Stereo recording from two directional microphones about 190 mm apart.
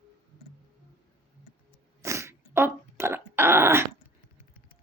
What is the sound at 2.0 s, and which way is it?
Dog, 15° right (ahead or behind).